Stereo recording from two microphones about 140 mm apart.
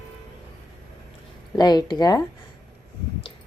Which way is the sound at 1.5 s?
30° left (ahead or behind).